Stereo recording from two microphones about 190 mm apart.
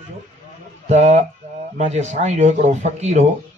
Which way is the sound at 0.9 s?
35° right (ahead or behind).